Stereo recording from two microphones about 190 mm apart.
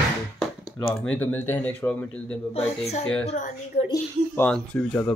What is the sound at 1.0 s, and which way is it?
Speech, 10° left (ahead or behind).